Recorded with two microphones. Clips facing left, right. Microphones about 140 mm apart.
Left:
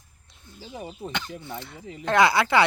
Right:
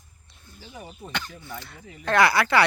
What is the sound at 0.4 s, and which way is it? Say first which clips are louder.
Speech: left 4 dB; 25° left (ahead or behind).